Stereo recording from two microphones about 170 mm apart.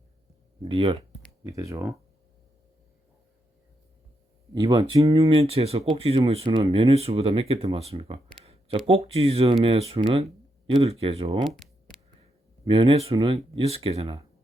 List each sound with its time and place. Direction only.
0.6 s speech: 35° right (ahead or behind)
1.5 s speech: 20° right (ahead or behind)
4.5 s speech: 25° right (ahead or behind)
8.4 s a sound: 35° right (ahead or behind)
8.9 s speech: 35° right (ahead or behind)
12.6 s speech: 30° right (ahead or behind)